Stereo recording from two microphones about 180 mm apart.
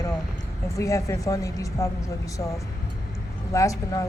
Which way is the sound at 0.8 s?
15° left (ahead or behind).